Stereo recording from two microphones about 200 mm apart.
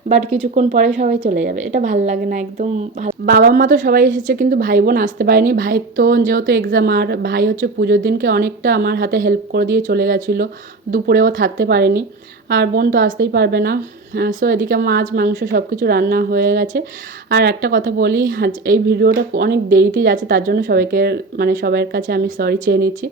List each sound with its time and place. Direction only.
0.1 s a woman's voice: 35° right (ahead or behind)
1.2 s a woman's voice: 50° right (ahead or behind)
13.1 s a woman's voice: 60° right (ahead or behind)